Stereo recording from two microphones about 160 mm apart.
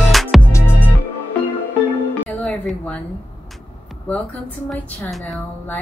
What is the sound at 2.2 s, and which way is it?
Music, 10° left (ahead or behind).